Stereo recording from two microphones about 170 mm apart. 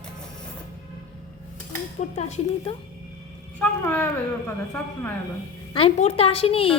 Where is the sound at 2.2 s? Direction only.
40° left (ahead or behind).